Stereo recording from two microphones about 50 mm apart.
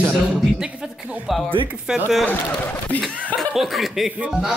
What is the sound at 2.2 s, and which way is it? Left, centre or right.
Speech, left.